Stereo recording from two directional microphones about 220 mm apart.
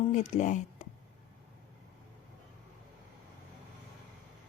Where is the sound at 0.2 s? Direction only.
30° left (ahead or behind).